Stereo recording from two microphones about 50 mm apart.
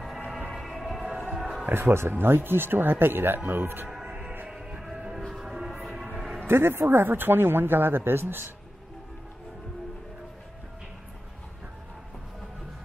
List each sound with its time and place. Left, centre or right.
0.6 s music: centre
1.7 s speech: right
4.5 s music: centre
6.4 s speech: right